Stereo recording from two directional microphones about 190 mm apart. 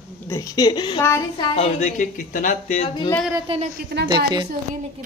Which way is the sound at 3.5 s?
40° right (ahead or behind).